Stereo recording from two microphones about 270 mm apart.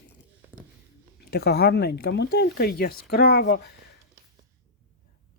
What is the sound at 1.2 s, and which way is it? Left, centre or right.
Speech, left.